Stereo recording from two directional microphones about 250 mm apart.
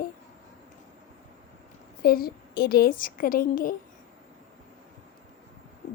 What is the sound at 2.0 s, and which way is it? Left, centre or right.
A woman's voice, left.